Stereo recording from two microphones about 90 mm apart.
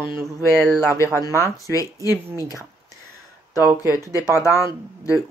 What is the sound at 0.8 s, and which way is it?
Speech, 30° left (ahead or behind).